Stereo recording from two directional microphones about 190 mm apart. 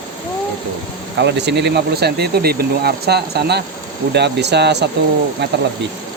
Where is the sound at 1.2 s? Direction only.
65° right (ahead or behind).